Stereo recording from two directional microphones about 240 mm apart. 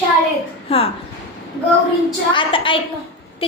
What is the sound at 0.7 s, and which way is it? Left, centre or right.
Speech, left.